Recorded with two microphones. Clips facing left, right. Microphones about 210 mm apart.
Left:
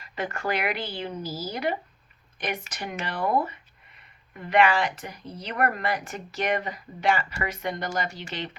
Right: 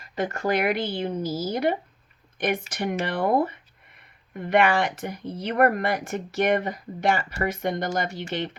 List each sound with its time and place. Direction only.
0.0 s speech: 45° right (ahead or behind)
1.2 s speech: 20° right (ahead or behind)
1.5 s speech: 45° right (ahead or behind)
3.0 s speech: 55° right (ahead or behind)